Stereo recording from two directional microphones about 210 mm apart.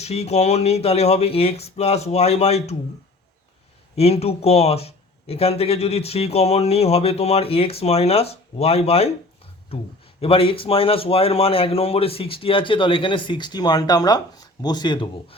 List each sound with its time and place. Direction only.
0.0 s speech: 30° left (ahead or behind)
3.9 s speech: 30° left (ahead or behind)